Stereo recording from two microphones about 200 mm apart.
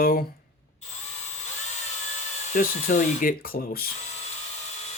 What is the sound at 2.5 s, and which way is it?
Speech, 40° left (ahead or behind).